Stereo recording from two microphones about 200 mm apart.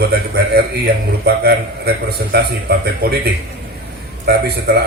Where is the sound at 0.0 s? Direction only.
55° right (ahead or behind).